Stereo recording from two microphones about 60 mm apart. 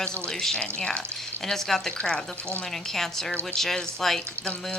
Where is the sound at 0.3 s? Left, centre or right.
Centre.